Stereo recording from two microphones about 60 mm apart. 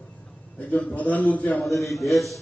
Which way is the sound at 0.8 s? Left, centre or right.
Left.